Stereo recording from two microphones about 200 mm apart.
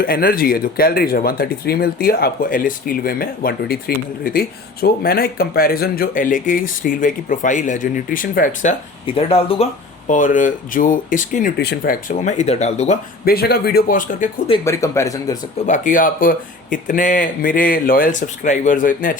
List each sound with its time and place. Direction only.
0.0 s speech: 45° left (ahead or behind)
9.0 s speech: 30° left (ahead or behind)
10.1 s speech: 40° left (ahead or behind)
13.2 s speech: 50° left (ahead or behind)
14.6 s speech: 15° left (ahead or behind)
15.6 s speech: 40° left (ahead or behind)